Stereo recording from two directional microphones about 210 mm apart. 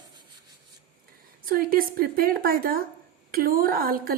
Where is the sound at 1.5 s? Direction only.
45° right (ahead or behind).